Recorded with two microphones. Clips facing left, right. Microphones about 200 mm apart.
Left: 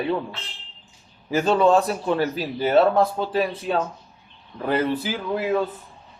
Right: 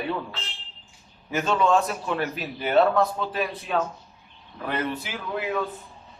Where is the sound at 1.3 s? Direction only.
35° left (ahead or behind).